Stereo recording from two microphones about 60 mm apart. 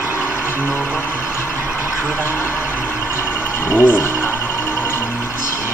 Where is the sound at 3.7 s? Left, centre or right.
Left.